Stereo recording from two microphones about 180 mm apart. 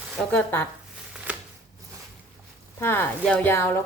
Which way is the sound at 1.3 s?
10° right (ahead or behind).